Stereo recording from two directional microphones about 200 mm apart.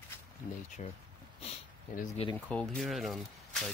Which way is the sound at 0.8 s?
35° left (ahead or behind).